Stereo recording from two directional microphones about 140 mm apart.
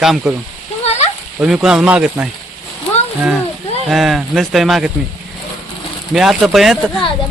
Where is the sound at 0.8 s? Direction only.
50° left (ahead or behind).